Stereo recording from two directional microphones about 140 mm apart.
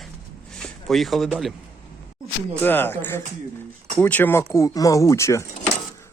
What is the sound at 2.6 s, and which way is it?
Speech, 15° left (ahead or behind).